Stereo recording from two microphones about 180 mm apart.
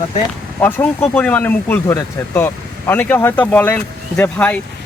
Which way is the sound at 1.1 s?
10° left (ahead or behind).